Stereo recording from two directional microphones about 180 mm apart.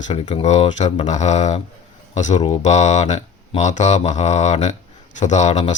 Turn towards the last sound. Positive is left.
turn(degrees=40)  # may be behind; listen again after turning